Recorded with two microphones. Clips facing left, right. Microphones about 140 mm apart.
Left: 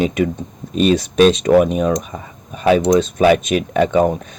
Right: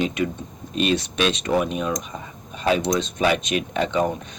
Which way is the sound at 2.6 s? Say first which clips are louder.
Left 8 dB; 50° left (ahead or behind).